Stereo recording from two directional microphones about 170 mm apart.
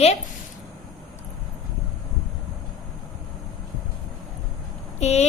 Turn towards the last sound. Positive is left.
turn(degrees=40)  # may be behind; listen again after turning